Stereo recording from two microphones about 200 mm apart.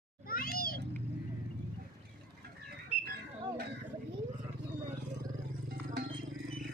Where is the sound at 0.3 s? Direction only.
45° left (ahead or behind).